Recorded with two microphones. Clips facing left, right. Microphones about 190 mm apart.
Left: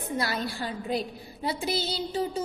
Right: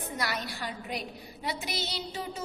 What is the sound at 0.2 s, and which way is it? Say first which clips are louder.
A woman's voice: left 3 dB; 30° left (ahead or behind).